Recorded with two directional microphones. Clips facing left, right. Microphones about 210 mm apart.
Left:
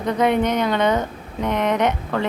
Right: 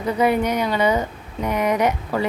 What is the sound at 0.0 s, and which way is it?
Speech, 5° right (ahead or behind).